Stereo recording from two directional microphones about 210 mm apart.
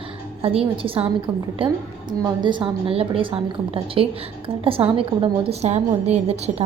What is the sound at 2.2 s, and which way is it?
A woman's voice, 20° right (ahead or behind).